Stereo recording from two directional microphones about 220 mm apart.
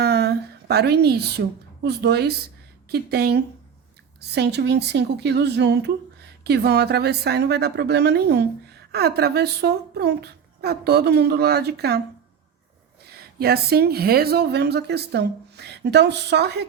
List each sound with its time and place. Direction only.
0.0 s a woman's voice: 50° right (ahead or behind)
13.1 s speech: 45° right (ahead or behind)